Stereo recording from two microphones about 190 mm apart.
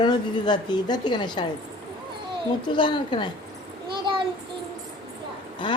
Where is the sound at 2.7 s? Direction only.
25° left (ahead or behind).